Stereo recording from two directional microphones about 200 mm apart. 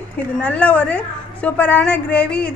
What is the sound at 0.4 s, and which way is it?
A woman's voice, 5° left (ahead or behind).